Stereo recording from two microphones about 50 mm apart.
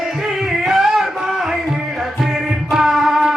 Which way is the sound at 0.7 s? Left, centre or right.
Centre.